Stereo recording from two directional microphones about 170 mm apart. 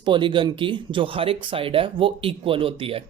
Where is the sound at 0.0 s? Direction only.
30° right (ahead or behind).